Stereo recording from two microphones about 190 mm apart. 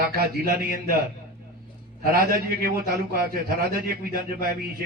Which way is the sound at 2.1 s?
55° right (ahead or behind).